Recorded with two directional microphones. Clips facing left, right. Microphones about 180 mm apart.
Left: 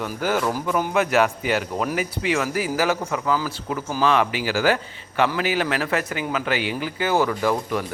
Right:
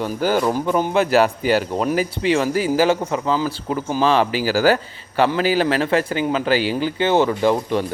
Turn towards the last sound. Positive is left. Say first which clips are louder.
# right 4 dB
turn(degrees=-25)  # may be behind; listen again after turning